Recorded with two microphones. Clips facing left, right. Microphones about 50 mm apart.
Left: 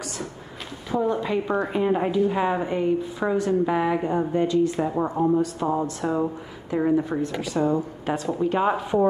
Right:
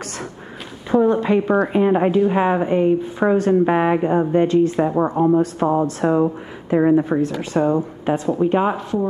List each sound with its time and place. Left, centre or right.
1.0 s a woman's voice: right